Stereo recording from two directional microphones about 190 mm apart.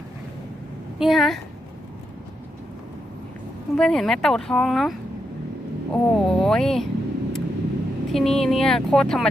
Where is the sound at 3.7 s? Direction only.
Centre (ahead or behind).